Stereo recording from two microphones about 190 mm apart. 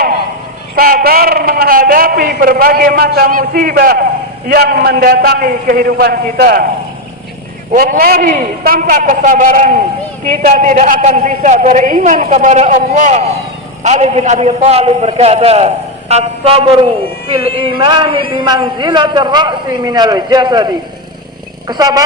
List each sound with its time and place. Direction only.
0.8 s a man's voice: 50° right (ahead or behind)
7.7 s a man's voice: 45° right (ahead or behind); by 20.7 s 20° right (ahead or behind)
21.7 s speech: 20° right (ahead or behind)